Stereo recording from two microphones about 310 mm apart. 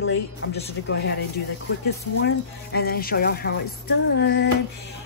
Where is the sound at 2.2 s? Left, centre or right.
Left.